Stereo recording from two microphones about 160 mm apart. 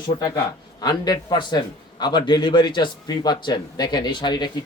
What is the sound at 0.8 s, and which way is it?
Speech, 25° left (ahead or behind).